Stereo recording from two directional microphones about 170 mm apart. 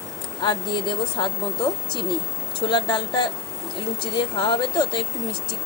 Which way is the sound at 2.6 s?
30° left (ahead or behind).